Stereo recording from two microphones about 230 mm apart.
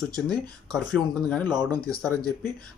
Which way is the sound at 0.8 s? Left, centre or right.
Centre.